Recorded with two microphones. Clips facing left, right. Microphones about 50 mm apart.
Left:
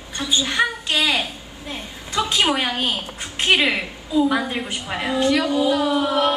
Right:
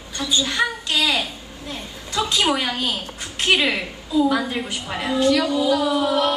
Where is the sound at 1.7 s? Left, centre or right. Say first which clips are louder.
Left 2 dB; centre.